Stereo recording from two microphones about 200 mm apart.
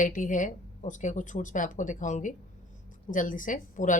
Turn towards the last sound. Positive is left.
turn(degrees=40)  # may be behind; listen again after turning